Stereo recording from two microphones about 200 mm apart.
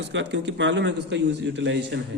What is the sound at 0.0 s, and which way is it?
A man's voice, 65° right (ahead or behind).